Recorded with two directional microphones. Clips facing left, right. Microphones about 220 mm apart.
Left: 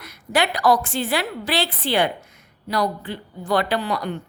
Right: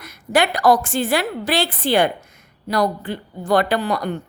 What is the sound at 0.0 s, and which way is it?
A woman's voice, 45° right (ahead or behind).